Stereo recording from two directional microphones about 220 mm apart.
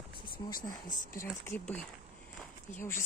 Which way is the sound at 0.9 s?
10° left (ahead or behind).